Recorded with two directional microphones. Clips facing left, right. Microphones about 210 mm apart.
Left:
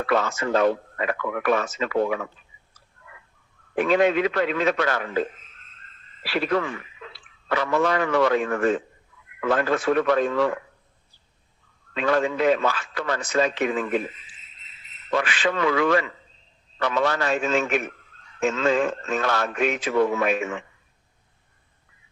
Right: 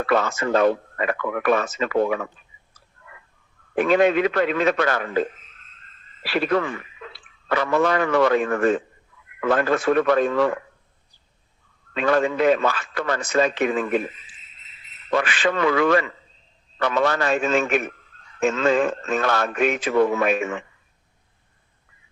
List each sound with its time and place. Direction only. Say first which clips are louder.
0.0 s speech: right 2 dB; 55° right (ahead or behind)
3.8 s speech: right 2 dB; 55° right (ahead or behind)
6.2 s speech: right 2 dB; 55° right (ahead or behind)
11.9 s speech: right 2 dB; 55° right (ahead or behind)
15.1 s speech: right 2 dB; 50° right (ahead or behind)